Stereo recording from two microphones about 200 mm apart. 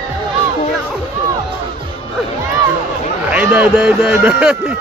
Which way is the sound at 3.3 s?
10° right (ahead or behind).